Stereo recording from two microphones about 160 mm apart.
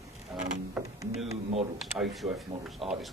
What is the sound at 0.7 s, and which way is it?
Speech, 20° right (ahead or behind).